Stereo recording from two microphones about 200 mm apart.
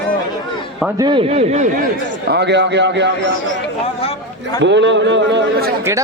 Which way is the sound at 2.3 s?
60° right (ahead or behind).